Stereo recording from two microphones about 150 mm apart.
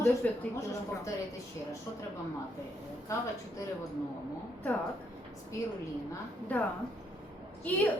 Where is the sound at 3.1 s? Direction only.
20° left (ahead or behind).